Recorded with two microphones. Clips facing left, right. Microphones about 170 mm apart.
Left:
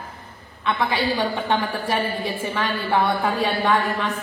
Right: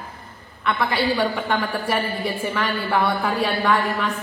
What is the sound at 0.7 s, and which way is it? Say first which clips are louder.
Speech: even; 20° left (ahead or behind).